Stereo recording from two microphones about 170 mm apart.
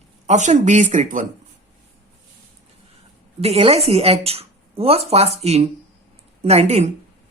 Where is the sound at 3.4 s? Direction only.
35° right (ahead or behind).